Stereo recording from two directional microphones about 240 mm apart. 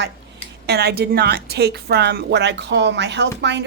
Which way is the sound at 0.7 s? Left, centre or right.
Right.